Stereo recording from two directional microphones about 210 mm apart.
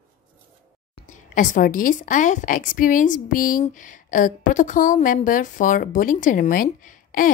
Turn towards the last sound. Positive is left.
turn(degrees=40)  # may be behind; listen again after turning